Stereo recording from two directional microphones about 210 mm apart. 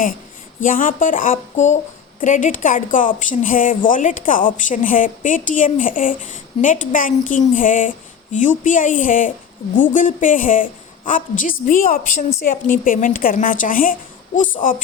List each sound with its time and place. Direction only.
0.6 s a woman's voice: 40° left (ahead or behind)